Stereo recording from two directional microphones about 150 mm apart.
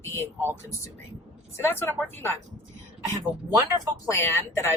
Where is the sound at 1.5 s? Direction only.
15° left (ahead or behind).